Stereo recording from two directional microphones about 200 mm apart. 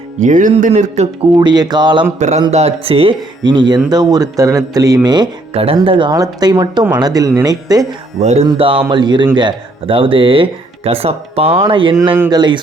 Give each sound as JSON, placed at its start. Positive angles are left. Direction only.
{"t": 0.2, "sound": "speech", "side_deg": -40}
{"t": 1.4, "sound": "speech", "side_deg": -20}
{"t": 2.1, "sound": "speech", "side_deg": -35}
{"t": 8.2, "sound": "speech", "side_deg": -35}
{"t": 12.1, "sound": "speech", "side_deg": -10}